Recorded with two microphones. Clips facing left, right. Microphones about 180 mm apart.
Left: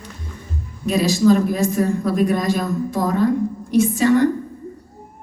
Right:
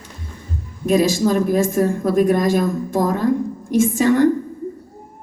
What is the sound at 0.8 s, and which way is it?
Speech, 50° right (ahead or behind).